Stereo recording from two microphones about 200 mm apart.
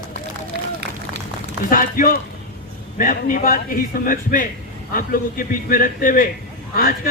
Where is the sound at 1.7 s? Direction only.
45° left (ahead or behind).